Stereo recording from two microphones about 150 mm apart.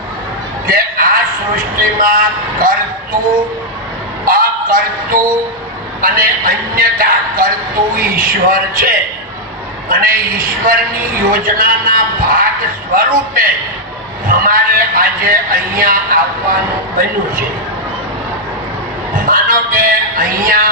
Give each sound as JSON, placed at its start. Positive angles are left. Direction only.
{"t": 0.7, "sound": "speech", "side_deg": -70}
{"t": 4.3, "sound": "a man's voice", "side_deg": -70}
{"t": 19.1, "sound": "speech", "side_deg": -65}